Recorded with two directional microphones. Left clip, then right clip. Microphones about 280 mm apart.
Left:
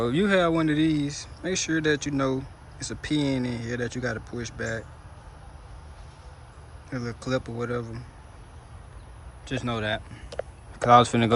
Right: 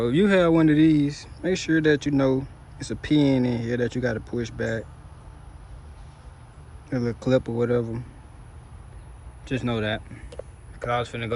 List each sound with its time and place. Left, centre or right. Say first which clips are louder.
0.0 s speech: right 3 dB; centre
6.9 s speech: right 7 dB; centre
9.5 s speech: right 2 dB; centre
10.8 s speech: left 9 dB; centre